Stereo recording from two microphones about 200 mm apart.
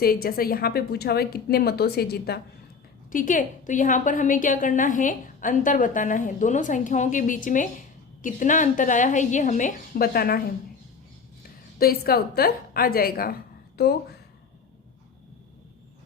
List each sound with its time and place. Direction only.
0.0 s a woman's voice: 50° left (ahead or behind)
3.1 s a woman's voice: 40° left (ahead or behind)
11.8 s a woman's voice: 50° left (ahead or behind)